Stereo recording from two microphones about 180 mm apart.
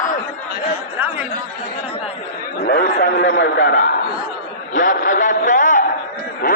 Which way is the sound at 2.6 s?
65° left (ahead or behind).